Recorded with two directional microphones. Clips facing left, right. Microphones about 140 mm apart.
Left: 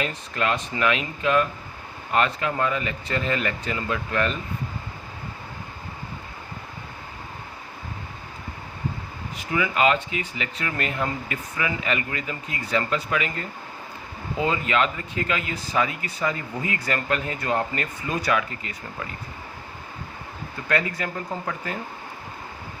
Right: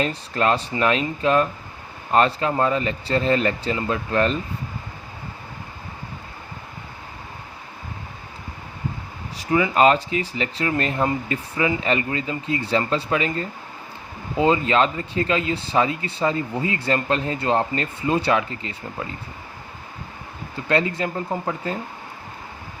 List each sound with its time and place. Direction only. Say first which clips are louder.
0.0 s speech: right 5 dB; 35° right (ahead or behind)
9.4 s speech: right 5 dB; 35° right (ahead or behind)
20.7 s speech: right 4 dB; 25° right (ahead or behind)